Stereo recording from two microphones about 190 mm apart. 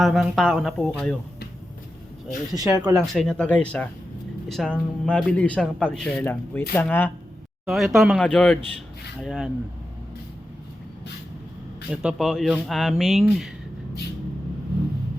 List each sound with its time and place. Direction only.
0.0 s speech: centre (ahead or behind)
2.6 s speech: 20° right (ahead or behind)
2.9 s speech: 5° left (ahead or behind)
11.9 s speech: centre (ahead or behind)